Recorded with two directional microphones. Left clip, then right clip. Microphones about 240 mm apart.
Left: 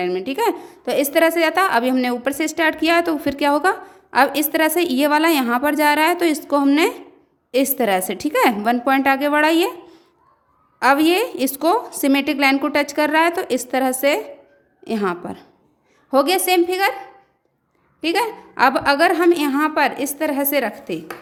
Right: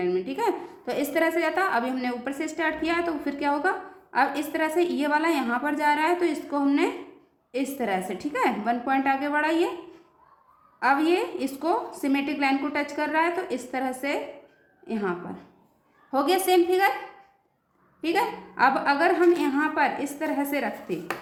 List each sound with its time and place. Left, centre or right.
0.0 s a woman's voice: left
10.8 s a woman's voice: left
18.0 s a woman's voice: left